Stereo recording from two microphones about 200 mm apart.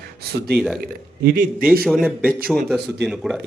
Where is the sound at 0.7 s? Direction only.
50° right (ahead or behind).